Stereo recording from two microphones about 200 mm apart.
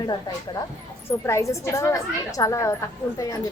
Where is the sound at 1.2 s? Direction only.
15° left (ahead or behind).